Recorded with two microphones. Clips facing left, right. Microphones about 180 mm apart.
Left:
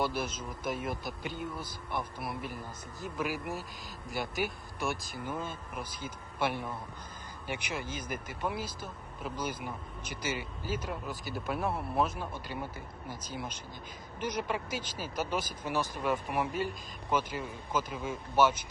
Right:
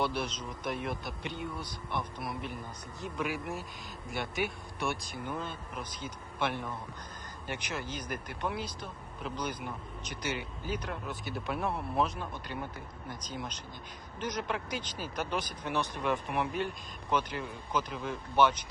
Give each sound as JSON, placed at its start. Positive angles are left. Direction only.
{"t": 0.0, "sound": "speech", "side_deg": 5}